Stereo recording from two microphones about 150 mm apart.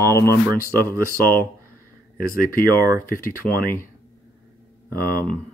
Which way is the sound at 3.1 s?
70° left (ahead or behind).